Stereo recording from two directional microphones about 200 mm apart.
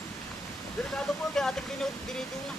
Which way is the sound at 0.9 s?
Centre (ahead or behind).